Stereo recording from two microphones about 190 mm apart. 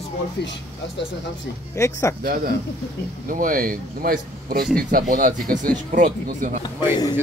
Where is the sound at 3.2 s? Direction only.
45° right (ahead or behind).